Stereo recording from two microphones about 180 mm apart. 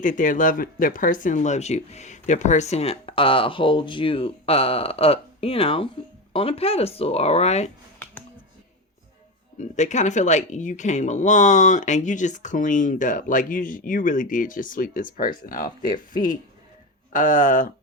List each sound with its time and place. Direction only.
0.0 s speech: 45° left (ahead or behind)
9.6 s speech: 40° left (ahead or behind)
17.1 s speech: 45° left (ahead or behind)